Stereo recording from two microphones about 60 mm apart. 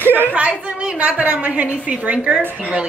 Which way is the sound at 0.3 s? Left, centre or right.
Right.